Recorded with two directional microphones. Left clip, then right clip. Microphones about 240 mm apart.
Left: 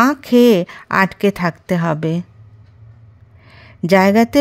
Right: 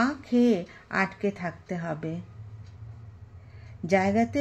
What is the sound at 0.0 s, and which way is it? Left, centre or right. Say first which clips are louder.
A woman's voice: left 13 dB; left.